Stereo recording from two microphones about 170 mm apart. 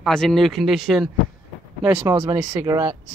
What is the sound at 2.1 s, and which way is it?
Speech, 25° right (ahead or behind).